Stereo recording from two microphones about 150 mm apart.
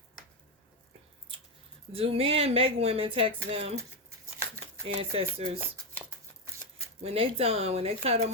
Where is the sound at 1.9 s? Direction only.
40° right (ahead or behind).